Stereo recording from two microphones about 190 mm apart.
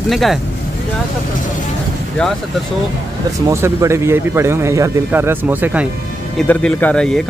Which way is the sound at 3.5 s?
15° right (ahead or behind).